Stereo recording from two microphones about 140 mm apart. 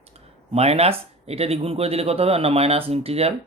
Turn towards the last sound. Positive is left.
turn(degrees=-45)  # may be behind; listen again after turning